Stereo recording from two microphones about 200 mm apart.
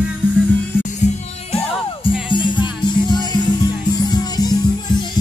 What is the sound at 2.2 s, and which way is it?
Music, 25° left (ahead or behind).